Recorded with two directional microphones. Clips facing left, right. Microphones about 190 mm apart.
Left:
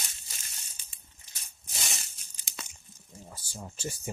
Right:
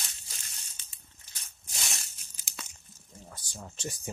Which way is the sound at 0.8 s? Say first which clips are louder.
Even; 10° left (ahead or behind).